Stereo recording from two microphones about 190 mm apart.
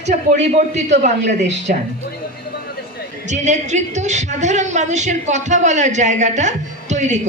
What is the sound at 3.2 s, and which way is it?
A man's voice, 40° right (ahead or behind).